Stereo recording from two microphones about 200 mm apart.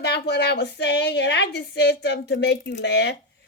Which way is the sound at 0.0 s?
55° left (ahead or behind).